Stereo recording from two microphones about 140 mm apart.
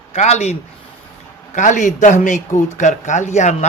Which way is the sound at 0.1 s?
55° left (ahead or behind).